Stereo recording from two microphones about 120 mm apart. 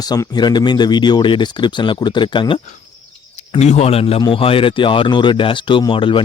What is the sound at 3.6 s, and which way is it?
Speech, 70° left (ahead or behind).